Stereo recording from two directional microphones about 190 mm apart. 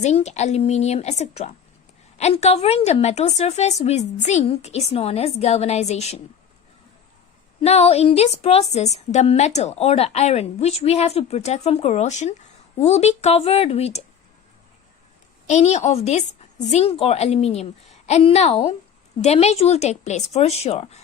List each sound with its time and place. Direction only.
0.0 s a woman's voice: 35° left (ahead or behind)
7.6 s a woman's voice: 35° left (ahead or behind)
15.4 s a woman's voice: 35° left (ahead or behind)